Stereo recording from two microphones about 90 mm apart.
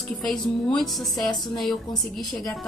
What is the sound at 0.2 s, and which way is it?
A woman's voice, 5° left (ahead or behind).